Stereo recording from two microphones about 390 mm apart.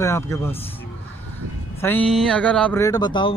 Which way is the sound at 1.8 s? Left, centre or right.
Centre.